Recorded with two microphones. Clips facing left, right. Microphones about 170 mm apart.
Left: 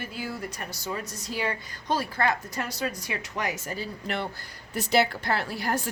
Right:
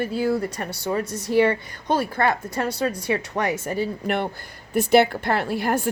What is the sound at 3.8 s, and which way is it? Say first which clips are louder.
A woman's voice: right 8 dB; 55° right (ahead or behind).